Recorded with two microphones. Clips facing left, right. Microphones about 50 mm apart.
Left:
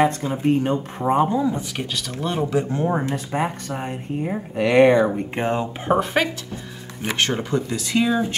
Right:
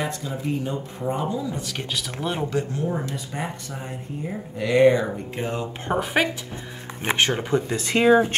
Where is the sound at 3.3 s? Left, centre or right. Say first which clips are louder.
Left 9 dB; left.